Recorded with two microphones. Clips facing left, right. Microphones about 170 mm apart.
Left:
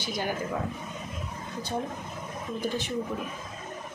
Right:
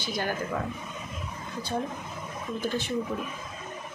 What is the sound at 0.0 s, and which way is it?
Speech, 15° left (ahead or behind).